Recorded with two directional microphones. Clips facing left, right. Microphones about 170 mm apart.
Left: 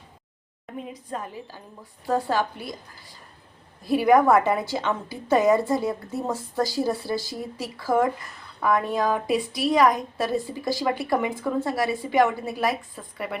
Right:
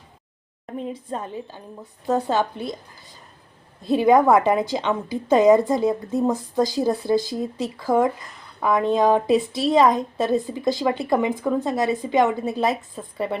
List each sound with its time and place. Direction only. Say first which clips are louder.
0.9 s a woman's voice: right 4 dB; 25° right (ahead or behind)
3.8 s a woman's voice: right 2 dB; 20° right (ahead or behind)